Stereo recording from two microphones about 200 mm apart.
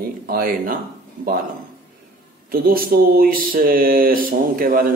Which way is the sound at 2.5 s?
45° right (ahead or behind).